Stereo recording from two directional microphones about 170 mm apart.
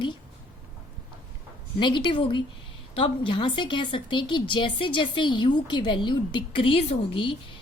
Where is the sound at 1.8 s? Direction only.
25° left (ahead or behind).